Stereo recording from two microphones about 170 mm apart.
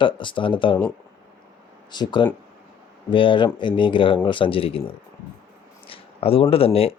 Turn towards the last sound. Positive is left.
turn(degrees=35)  # may be behind; listen again after turning